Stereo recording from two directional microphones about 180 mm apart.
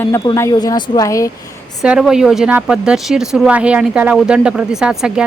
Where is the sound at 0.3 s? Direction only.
20° left (ahead or behind).